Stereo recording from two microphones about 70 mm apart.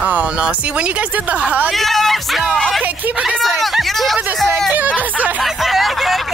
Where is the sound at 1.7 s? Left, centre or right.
Centre.